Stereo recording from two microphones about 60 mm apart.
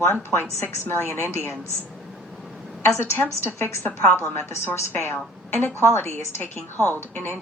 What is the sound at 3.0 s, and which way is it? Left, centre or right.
A woman's voice, left.